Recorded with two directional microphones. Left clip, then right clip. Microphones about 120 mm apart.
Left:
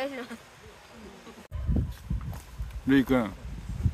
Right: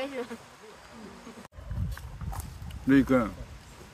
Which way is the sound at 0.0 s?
25° left (ahead or behind).